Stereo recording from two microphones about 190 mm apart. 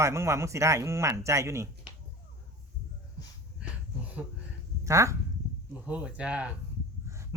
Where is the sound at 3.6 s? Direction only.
5° right (ahead or behind).